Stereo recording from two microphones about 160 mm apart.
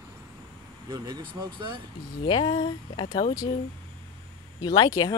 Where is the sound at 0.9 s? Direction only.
25° right (ahead or behind).